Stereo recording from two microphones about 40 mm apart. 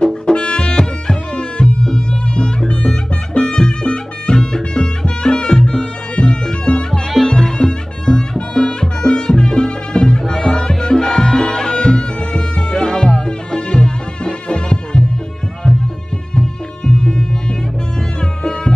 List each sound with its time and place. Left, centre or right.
0.0 s music: left
7.1 s music: centre
7.3 s music: centre
16.3 s music: left